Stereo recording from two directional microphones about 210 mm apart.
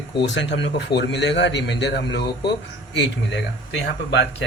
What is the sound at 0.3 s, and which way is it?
Speech, 60° left (ahead or behind).